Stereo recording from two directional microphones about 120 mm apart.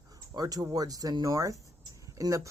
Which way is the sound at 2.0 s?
30° right (ahead or behind).